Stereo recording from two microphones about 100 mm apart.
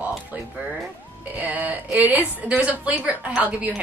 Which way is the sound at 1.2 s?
15° right (ahead or behind).